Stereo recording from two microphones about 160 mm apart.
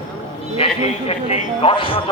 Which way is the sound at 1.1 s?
40° left (ahead or behind).